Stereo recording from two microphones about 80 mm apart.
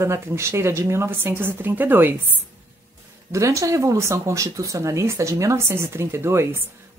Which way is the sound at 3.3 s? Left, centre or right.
Right.